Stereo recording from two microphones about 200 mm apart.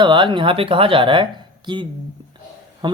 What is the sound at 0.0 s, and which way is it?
Speech, 25° right (ahead or behind).